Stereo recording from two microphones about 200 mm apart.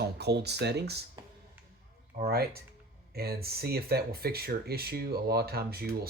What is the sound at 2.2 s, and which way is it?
Speech, 50° right (ahead or behind).